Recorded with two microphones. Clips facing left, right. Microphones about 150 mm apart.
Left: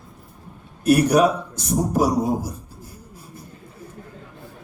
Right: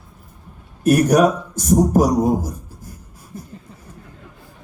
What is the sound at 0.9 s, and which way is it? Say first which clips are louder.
A man's voice: right 2 dB; 50° right (ahead or behind).